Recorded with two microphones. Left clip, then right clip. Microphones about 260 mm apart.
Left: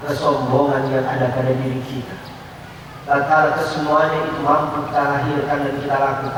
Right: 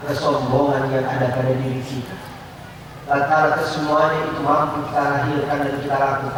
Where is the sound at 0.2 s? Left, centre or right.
Left.